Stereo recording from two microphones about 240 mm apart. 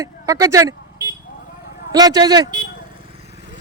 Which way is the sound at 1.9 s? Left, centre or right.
Centre.